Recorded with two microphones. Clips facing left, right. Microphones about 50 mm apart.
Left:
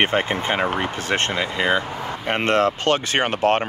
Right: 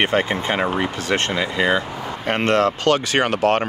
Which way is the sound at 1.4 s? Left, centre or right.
Centre.